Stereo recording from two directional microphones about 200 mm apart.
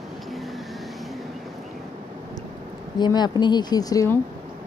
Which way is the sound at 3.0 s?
20° left (ahead or behind).